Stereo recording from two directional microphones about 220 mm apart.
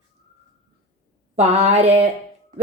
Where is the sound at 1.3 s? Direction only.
30° right (ahead or behind).